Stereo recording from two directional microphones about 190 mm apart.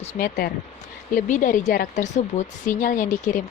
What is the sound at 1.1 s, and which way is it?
Speech, 45° left (ahead or behind).